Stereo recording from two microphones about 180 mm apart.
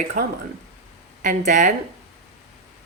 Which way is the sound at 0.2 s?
55° right (ahead or behind).